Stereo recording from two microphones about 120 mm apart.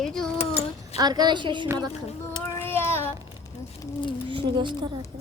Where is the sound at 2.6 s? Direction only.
20° left (ahead or behind).